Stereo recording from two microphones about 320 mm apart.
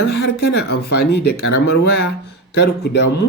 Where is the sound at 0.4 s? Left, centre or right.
Left.